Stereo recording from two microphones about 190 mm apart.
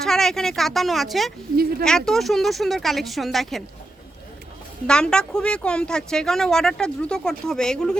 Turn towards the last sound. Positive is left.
turn(degrees=5)  # may be behind; listen again after turning